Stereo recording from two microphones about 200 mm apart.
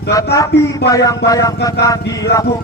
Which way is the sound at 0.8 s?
15° left (ahead or behind).